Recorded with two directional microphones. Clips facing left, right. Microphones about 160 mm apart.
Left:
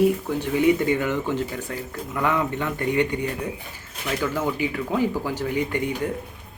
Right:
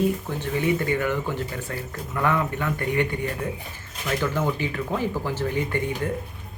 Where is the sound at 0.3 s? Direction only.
15° left (ahead or behind).